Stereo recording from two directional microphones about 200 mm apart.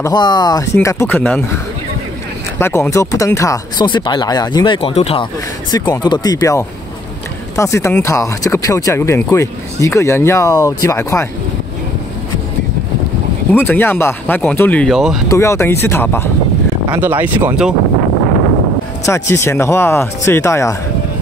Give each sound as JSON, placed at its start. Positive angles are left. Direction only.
{"t": 0.0, "sound": "speech", "side_deg": 20}
{"t": 2.6, "sound": "speech", "side_deg": 10}
{"t": 13.5, "sound": "speech", "side_deg": 10}
{"t": 15.2, "sound": "speech", "side_deg": 15}
{"t": 16.9, "sound": "speech", "side_deg": -10}
{"t": 19.0, "sound": "speech", "side_deg": 15}